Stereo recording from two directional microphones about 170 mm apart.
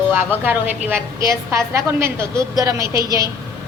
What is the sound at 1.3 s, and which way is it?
A woman's voice, 15° right (ahead or behind).